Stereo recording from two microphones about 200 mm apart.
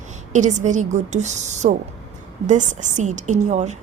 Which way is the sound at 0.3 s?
35° right (ahead or behind).